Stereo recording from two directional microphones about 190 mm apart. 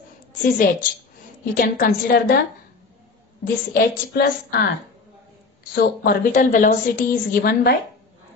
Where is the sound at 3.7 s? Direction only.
55° left (ahead or behind).